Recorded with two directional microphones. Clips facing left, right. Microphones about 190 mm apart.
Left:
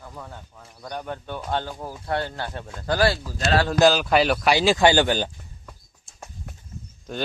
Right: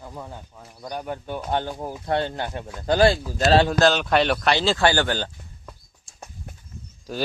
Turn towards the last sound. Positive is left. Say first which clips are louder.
# right 1 dB
turn(degrees=0)  # may be behind; listen again after turning